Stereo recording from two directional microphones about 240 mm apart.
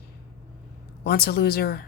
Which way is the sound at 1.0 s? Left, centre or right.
Left.